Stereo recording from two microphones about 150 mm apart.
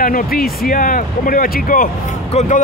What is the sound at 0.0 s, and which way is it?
Speech, 75° left (ahead or behind).